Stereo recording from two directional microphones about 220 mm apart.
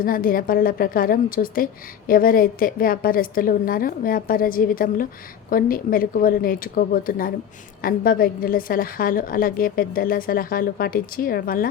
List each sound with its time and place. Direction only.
0.0 s a woman's voice: 40° left (ahead or behind)